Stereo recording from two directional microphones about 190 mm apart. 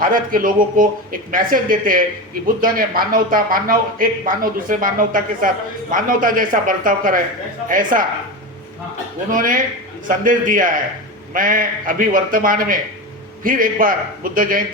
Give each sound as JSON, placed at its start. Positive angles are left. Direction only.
{"t": 0.0, "sound": "a man's voice", "side_deg": -45}
{"t": 9.3, "sound": "a man's voice", "side_deg": -45}